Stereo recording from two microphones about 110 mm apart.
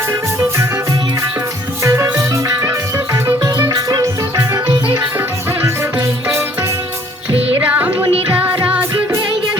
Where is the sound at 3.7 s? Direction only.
35° right (ahead or behind).